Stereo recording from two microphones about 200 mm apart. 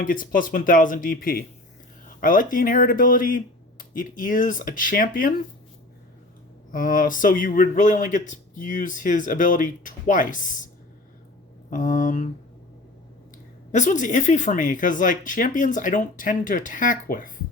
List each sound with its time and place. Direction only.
0.0 s speech: 45° left (ahead or behind)
6.7 s a man's voice: 45° left (ahead or behind)
11.7 s a man's voice: 40° left (ahead or behind)
13.7 s a man's voice: 40° left (ahead or behind)